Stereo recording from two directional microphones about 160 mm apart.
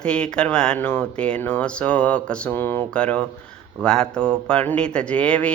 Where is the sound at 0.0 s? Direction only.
5° left (ahead or behind).